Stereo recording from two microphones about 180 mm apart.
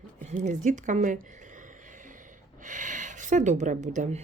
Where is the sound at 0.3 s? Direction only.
40° right (ahead or behind).